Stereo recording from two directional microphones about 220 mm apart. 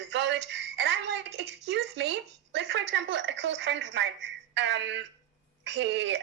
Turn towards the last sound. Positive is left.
turn(degrees=-55)  # may be behind; listen again after turning